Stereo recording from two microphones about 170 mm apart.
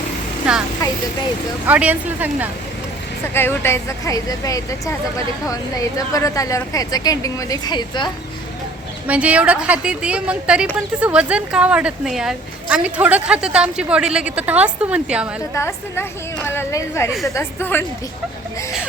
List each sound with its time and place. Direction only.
0.4 s a woman's voice: 5° right (ahead or behind)
1.6 s speech: 10° right (ahead or behind)
3.3 s a woman's voice: 15° left (ahead or behind)
9.0 s speech: 10° right (ahead or behind)
15.5 s a woman's voice: 15° left (ahead or behind)